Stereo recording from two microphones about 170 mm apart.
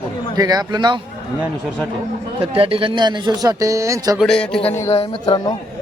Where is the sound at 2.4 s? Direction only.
35° right (ahead or behind); by 4.1 s 20° right (ahead or behind).